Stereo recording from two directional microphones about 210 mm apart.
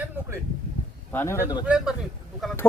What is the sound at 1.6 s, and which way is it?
Speech, 5° right (ahead or behind).